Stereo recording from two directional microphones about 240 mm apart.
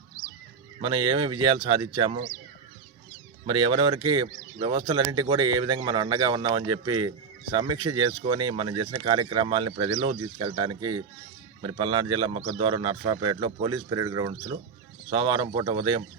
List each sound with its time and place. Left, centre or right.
0.8 s a man's voice: centre
3.4 s a man's voice: centre